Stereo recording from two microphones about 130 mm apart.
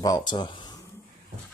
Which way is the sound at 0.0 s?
30° left (ahead or behind).